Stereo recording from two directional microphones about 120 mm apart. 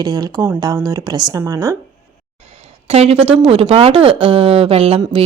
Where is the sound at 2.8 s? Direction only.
55° right (ahead or behind).